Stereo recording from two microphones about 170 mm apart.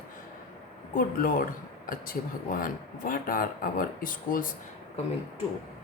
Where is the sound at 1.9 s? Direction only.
55° left (ahead or behind).